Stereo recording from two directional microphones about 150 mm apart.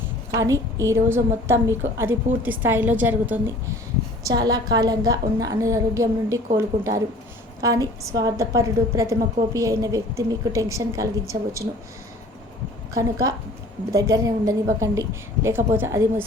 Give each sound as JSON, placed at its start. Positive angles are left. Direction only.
{"t": 0.3, "sound": "a woman's voice", "side_deg": -20}
{"t": 4.3, "sound": "a woman's voice", "side_deg": -25}
{"t": 12.9, "sound": "a woman's voice", "side_deg": -20}